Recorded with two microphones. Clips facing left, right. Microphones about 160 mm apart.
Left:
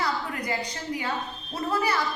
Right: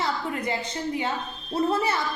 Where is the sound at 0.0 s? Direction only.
25° right (ahead or behind).